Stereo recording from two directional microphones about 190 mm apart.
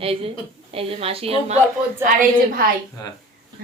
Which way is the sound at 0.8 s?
30° right (ahead or behind).